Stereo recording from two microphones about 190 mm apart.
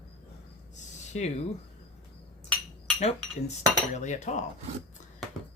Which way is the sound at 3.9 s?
40° left (ahead or behind).